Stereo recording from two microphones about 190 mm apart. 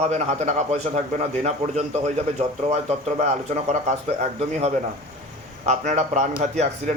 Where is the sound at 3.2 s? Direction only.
40° right (ahead or behind).